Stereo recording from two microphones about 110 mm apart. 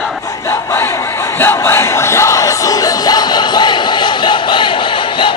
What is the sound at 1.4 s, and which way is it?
Music, 20° left (ahead or behind).